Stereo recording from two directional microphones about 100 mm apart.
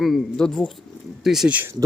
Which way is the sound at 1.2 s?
5° right (ahead or behind).